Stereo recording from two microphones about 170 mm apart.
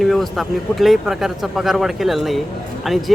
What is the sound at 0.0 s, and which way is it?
Speech, centre (ahead or behind).